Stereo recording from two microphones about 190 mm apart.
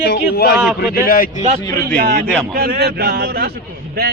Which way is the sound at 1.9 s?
55° right (ahead or behind).